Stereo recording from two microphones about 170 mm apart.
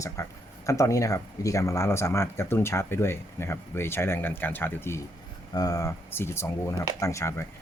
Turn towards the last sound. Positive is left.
turn(degrees=15)  # may be behind; listen again after turning